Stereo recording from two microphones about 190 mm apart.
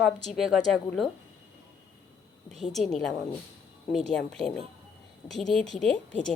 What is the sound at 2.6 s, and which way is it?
A woman's voice, centre (ahead or behind).